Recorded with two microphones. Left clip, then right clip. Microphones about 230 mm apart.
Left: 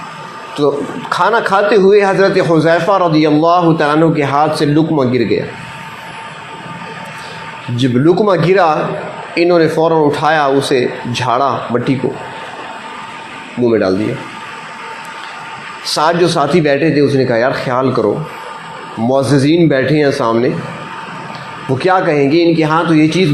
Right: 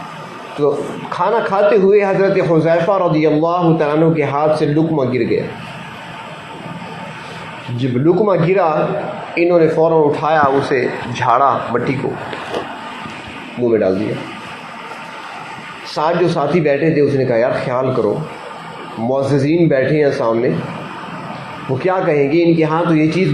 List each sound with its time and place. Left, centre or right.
0.6 s a man's voice: left
7.8 s a man's voice: left
10.8 s speech: centre
11.1 s a man's voice: left
13.7 s a man's voice: left
15.9 s a man's voice: left
21.8 s a man's voice: left